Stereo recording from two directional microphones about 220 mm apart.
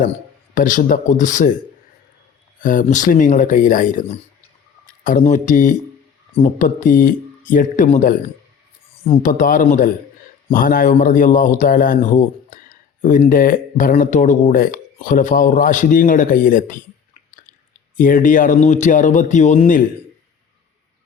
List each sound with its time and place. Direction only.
0.5 s speech: 35° left (ahead or behind)
2.6 s speech: 35° left (ahead or behind)
5.0 s speech: 35° left (ahead or behind)
9.2 s speech: 40° left (ahead or behind)
17.9 s speech: 40° left (ahead or behind)